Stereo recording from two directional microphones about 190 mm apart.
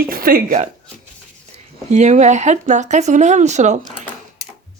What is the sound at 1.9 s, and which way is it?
Speech, 40° right (ahead or behind).